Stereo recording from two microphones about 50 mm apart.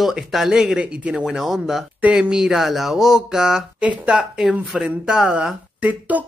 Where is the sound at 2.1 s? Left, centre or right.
Centre.